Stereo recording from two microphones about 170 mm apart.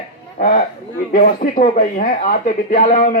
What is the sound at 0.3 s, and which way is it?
A man's voice, 45° left (ahead or behind).